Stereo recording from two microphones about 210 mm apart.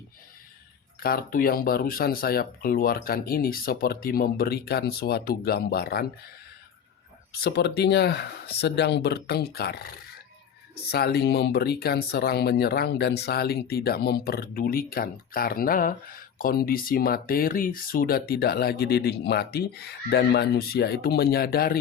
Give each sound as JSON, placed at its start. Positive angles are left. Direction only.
{"t": 0.9, "sound": "speech", "side_deg": 45}
{"t": 7.3, "sound": "speech", "side_deg": 50}